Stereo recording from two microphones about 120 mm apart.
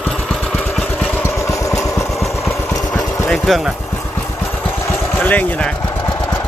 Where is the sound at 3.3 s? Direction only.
Centre (ahead or behind).